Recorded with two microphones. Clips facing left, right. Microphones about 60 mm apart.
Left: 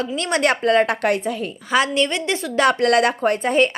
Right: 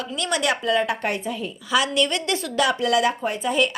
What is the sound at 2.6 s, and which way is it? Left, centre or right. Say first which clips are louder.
A woman's voice: left 5 dB; left.